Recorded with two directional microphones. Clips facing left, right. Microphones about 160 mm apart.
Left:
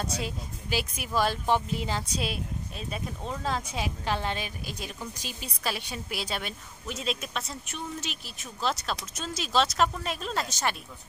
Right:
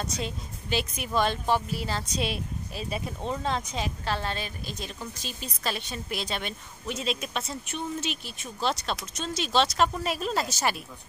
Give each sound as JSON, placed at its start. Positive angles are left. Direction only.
{"t": 0.2, "sound": "speech", "side_deg": 5}
{"t": 1.5, "sound": "speech", "side_deg": 20}
{"t": 2.1, "sound": "speech", "side_deg": 0}